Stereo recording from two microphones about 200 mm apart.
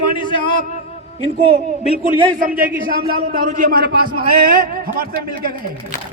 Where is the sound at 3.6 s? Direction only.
50° right (ahead or behind).